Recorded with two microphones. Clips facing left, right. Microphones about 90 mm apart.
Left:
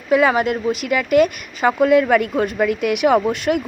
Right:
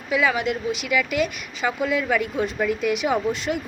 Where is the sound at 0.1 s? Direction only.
45° left (ahead or behind).